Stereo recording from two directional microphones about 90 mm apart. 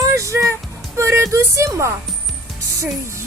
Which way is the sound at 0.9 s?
30° right (ahead or behind).